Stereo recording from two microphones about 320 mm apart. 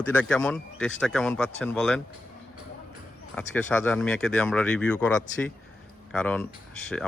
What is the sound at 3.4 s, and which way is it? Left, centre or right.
Speech, centre.